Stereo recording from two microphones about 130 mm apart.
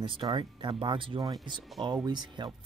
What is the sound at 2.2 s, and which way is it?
Speech, 35° right (ahead or behind).